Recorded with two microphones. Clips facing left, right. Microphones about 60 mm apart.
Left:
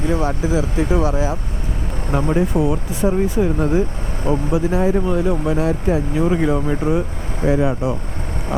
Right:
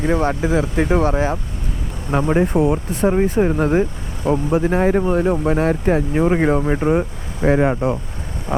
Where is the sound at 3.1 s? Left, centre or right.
Right.